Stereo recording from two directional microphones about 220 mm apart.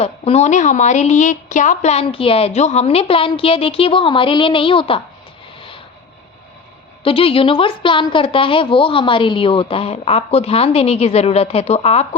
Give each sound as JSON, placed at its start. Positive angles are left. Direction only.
{"t": 0.0, "sound": "a woman's voice", "side_deg": 30}
{"t": 5.5, "sound": "vehicle", "side_deg": 25}
{"t": 7.0, "sound": "a woman's voice", "side_deg": 25}